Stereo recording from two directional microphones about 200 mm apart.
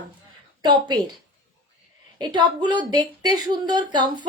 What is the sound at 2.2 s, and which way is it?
Speech, 20° right (ahead or behind).